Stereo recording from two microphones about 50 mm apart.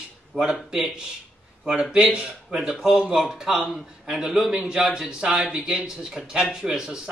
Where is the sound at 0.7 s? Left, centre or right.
Centre.